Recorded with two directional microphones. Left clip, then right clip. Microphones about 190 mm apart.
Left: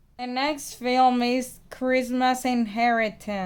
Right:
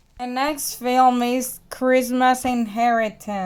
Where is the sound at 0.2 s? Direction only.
15° right (ahead or behind).